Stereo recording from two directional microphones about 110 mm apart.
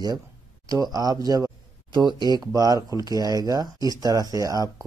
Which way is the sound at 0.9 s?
35° right (ahead or behind).